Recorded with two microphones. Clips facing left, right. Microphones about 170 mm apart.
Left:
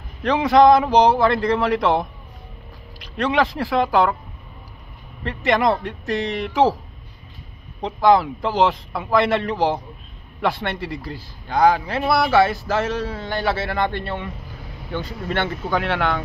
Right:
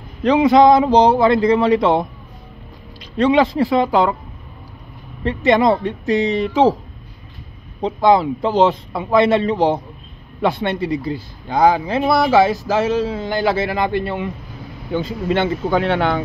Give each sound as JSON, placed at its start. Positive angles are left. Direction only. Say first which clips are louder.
{"t": 0.3, "sound": "speech", "louder": "right 3 dB", "side_deg": -20}
{"t": 5.5, "sound": "speech", "louder": "right 4 dB", "side_deg": -25}
{"t": 8.0, "sound": "a man's voice", "louder": "right 2 dB", "side_deg": -20}